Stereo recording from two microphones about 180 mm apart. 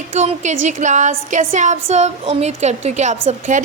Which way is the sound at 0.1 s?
40° right (ahead or behind).